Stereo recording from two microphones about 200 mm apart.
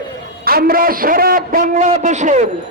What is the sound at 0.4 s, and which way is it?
A man's voice, 50° right (ahead or behind).